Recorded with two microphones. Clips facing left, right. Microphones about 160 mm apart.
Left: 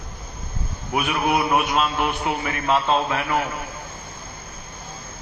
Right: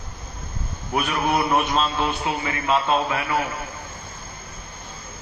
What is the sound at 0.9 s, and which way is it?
Mantra, 10° left (ahead or behind).